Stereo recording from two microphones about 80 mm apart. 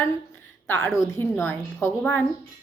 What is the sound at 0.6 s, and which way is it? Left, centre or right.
A woman's voice, left.